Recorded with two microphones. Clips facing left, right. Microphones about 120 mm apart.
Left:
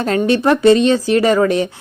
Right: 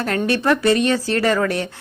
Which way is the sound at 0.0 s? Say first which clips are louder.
Left 5 dB; 20° left (ahead or behind).